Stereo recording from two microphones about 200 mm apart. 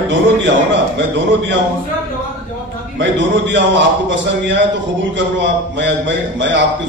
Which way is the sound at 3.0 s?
65° right (ahead or behind).